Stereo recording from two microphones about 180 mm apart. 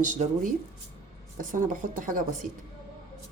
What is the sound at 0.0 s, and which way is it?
Speech, 45° right (ahead or behind).